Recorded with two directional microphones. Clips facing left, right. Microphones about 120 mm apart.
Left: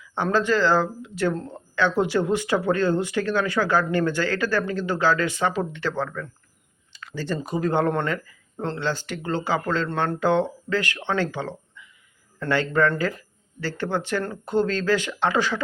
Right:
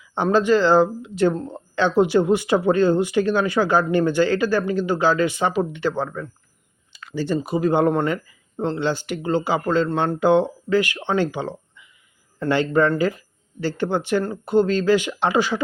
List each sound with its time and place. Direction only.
0.0 s speech: 20° right (ahead or behind)